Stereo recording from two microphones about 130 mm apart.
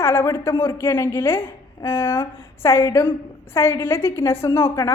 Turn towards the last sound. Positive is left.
turn(degrees=20)  # may be behind; listen again after turning